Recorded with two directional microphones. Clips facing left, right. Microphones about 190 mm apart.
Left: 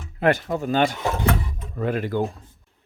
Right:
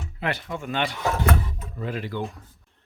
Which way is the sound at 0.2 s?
45° left (ahead or behind).